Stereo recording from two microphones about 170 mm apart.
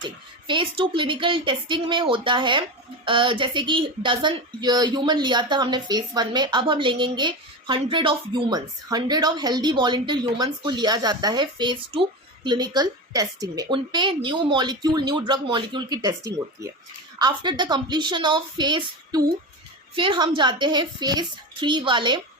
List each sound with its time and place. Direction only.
0.0 s speech: 30° right (ahead or behind)